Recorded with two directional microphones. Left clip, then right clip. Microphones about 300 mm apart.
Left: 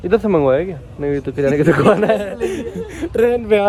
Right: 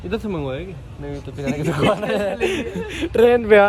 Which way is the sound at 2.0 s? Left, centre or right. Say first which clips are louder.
Left 4 dB; centre.